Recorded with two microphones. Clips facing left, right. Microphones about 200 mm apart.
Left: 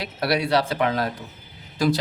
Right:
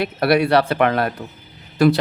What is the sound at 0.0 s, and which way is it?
Speech, 60° right (ahead or behind).